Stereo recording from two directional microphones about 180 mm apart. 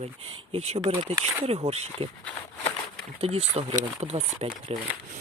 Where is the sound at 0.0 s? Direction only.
35° right (ahead or behind).